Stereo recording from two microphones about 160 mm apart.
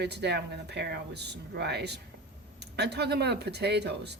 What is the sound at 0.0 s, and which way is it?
Speech, 90° right.